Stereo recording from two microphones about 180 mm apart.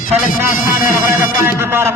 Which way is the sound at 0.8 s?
15° right (ahead or behind).